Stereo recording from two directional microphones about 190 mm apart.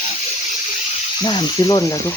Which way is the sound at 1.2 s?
25° left (ahead or behind).